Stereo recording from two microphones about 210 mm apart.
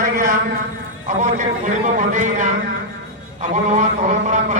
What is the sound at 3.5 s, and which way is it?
A man's voice, 35° right (ahead or behind).